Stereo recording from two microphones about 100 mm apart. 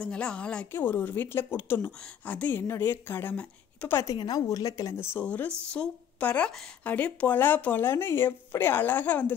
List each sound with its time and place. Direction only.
0.0 s speech: 10° left (ahead or behind)
0.7 s speech: 20° left (ahead or behind)
3.9 s speech: 30° left (ahead or behind); by 9.3 s 15° left (ahead or behind)